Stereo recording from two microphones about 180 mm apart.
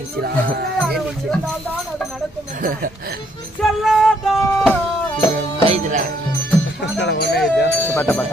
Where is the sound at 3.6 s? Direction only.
Centre (ahead or behind).